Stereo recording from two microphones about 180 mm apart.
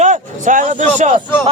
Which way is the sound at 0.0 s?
45° right (ahead or behind).